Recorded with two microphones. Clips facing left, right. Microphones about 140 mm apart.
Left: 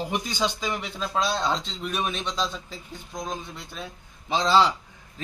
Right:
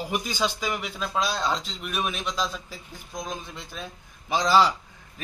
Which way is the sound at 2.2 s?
25° left (ahead or behind).